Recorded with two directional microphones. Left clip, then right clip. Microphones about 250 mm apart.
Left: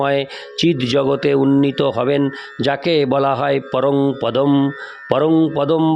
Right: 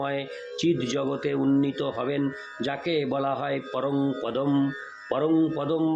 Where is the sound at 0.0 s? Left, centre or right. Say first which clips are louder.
Left 12 dB; left.